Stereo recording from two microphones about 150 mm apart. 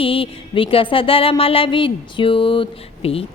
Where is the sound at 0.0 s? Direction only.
35° left (ahead or behind).